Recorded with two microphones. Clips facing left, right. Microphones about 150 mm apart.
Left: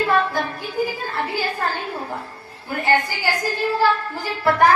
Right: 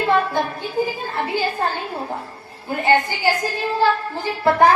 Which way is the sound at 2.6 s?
20° right (ahead or behind).